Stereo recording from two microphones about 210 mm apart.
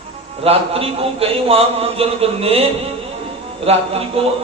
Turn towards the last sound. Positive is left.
turn(degrees=-30)  # may be behind; listen again after turning